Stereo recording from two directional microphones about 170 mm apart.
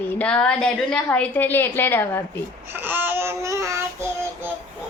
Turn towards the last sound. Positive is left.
turn(degrees=-15)  # may be behind; listen again after turning